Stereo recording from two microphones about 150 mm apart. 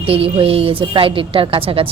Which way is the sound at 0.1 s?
40° right (ahead or behind).